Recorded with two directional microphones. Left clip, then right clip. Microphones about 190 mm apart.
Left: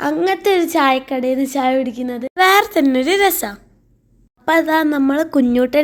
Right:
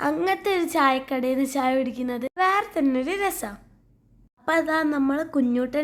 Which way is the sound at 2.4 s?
25° left (ahead or behind).